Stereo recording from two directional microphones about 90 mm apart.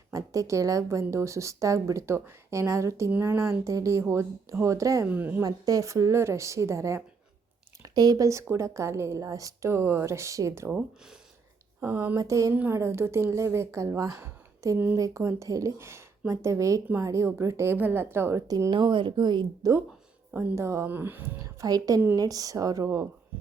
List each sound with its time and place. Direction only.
0.1 s speech: 40° right (ahead or behind)
5.0 s speech: 20° right (ahead or behind)
5.4 s speech: 40° right (ahead or behind)
7.8 s a sound: 50° right (ahead or behind)
8.3 s speech: 35° right (ahead or behind)
11.8 s speech: 25° right (ahead or behind)
12.1 s speech: 35° right (ahead or behind)
18.4 s speech: 45° right (ahead or behind)
18.7 s speech: 65° right (ahead or behind)
20.3 s speech: 30° right (ahead or behind)
21.4 s a woman's voice: 40° right (ahead or behind)